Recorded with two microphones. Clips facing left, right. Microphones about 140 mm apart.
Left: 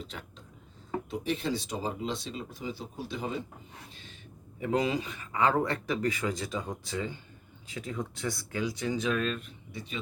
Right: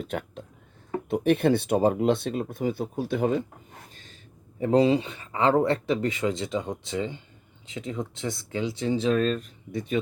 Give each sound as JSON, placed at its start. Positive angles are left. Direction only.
{"t": 0.0, "sound": "speech", "side_deg": -55}
{"t": 4.6, "sound": "speech", "side_deg": -30}